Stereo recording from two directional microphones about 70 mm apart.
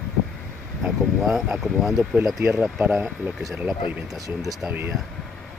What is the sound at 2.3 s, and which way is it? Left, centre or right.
Speech, right.